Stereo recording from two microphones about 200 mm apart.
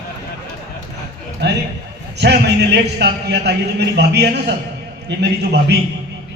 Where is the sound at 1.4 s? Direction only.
60° right (ahead or behind).